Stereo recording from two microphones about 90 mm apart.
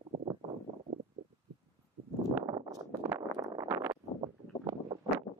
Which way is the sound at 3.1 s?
30° right (ahead or behind).